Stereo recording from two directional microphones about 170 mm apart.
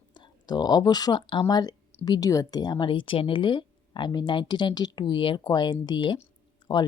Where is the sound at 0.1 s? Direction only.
25° left (ahead or behind).